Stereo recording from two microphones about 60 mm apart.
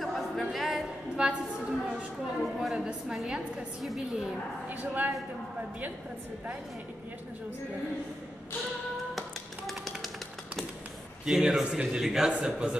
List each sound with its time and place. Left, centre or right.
0.0 s a sound: centre
1.2 s a man's voice: centre
2.4 s a woman's voice: centre
4.6 s speech: right
9.7 s tap: centre
11.2 s a man's voice: centre